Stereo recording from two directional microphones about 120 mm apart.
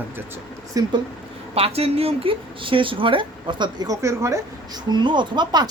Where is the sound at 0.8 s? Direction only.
30° right (ahead or behind).